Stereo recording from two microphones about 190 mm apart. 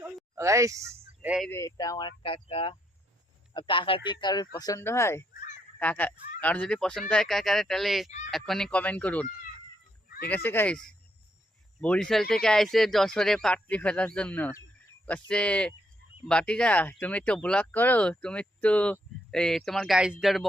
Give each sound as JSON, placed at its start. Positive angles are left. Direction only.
{"t": 0.3, "sound": "speech", "side_deg": -15}
{"t": 1.5, "sound": "speech", "side_deg": 15}
{"t": 10.2, "sound": "speech", "side_deg": 10}